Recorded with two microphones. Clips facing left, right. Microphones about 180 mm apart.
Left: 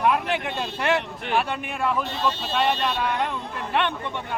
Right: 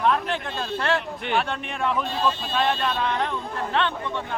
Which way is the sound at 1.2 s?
5° left (ahead or behind).